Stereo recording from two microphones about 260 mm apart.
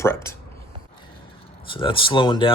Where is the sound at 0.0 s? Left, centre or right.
Centre.